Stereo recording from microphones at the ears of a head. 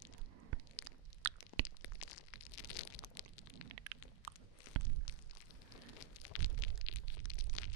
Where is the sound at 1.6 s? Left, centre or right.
Left.